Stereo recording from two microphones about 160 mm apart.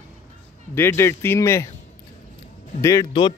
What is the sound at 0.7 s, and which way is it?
Speech, 15° left (ahead or behind).